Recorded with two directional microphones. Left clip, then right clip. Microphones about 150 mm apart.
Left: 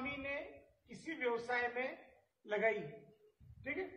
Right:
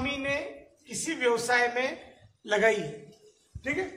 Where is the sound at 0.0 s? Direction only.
20° right (ahead or behind).